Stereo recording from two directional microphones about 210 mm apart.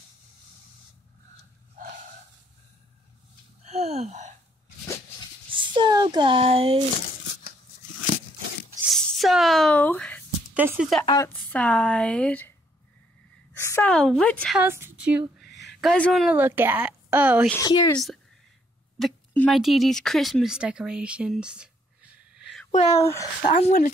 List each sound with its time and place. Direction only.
3.6 s gasp: 30° right (ahead or behind)
5.5 s a sound: 20° right (ahead or behind)
8.8 s a sound: centre (ahead or behind)
10.5 s speech: 5° right (ahead or behind)
11.1 s speech: 15° left (ahead or behind)
13.6 s a woman's voice: 10° left (ahead or behind)
14.6 s speech: 10° right (ahead or behind)
15.4 s a sound: 55° left (ahead or behind)
15.7 s speech: centre (ahead or behind)
17.5 s speech: 15° left (ahead or behind)
17.9 s speech: centre (ahead or behind)
22.7 s speech: 30° left (ahead or behind)
22.9 s speech: 15° left (ahead or behind)
23.4 s speech: 40° left (ahead or behind)